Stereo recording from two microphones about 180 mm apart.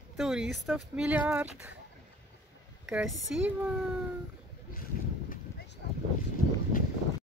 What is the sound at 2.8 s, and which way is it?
Speech, centre (ahead or behind).